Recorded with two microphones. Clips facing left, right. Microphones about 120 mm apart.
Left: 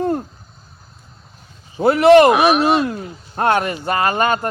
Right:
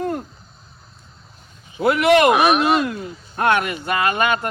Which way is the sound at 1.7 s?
35° left (ahead or behind).